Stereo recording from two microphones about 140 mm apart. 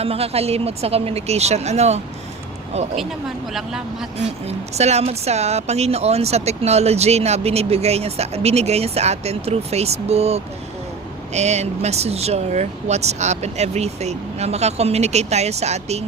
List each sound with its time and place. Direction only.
0.0 s speech: 45° right (ahead or behind)
3.5 s speech: 5° right (ahead or behind)
4.4 s speech: 50° right (ahead or behind)